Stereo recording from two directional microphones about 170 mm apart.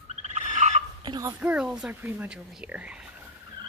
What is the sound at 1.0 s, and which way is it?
Hiccup, 25° right (ahead or behind).